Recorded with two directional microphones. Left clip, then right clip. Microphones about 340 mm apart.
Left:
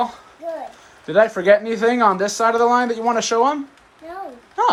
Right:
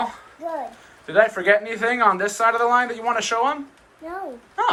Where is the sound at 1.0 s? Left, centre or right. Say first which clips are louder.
Left 3 dB; centre.